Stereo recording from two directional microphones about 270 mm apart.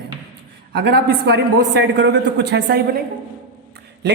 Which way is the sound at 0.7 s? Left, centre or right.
Right.